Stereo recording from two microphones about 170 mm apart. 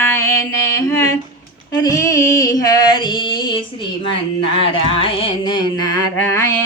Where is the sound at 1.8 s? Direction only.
20° left (ahead or behind).